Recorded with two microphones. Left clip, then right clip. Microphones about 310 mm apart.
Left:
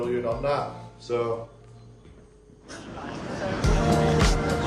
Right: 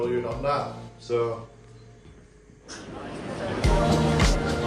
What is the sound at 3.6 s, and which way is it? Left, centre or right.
Music, centre.